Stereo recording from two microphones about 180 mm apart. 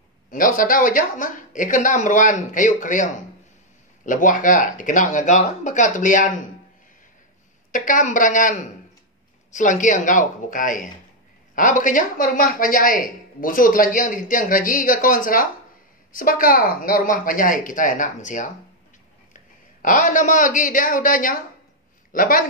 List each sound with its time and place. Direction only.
0.3 s speech: 50° left (ahead or behind)
7.7 s speech: 45° left (ahead or behind)
19.8 s a man's voice: 50° left (ahead or behind)